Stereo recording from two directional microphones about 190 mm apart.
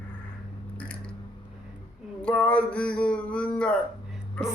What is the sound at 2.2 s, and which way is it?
A man's voice, 5° left (ahead or behind).